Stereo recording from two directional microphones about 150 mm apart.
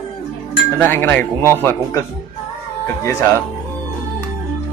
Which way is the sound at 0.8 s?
15° left (ahead or behind).